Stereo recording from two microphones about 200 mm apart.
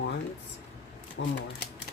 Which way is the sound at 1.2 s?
60° left (ahead or behind).